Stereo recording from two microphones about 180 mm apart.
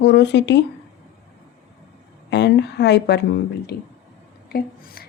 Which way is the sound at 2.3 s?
70° left (ahead or behind).